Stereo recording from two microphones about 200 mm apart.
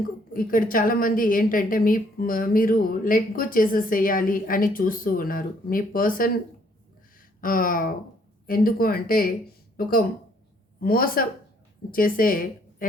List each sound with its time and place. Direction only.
0.3 s a woman's voice: 45° left (ahead or behind)
7.4 s a woman's voice: 45° left (ahead or behind)
10.8 s a woman's voice: 45° left (ahead or behind)